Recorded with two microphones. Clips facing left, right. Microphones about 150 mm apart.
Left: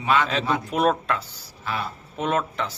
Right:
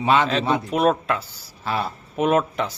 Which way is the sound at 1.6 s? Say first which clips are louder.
Right 4 dB; 35° right (ahead or behind).